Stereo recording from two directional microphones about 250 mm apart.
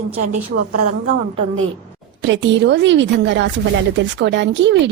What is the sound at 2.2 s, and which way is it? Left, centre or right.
A woman's voice, right.